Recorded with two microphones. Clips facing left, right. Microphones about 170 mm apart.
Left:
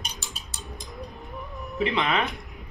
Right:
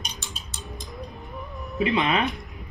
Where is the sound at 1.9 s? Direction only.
25° right (ahead or behind).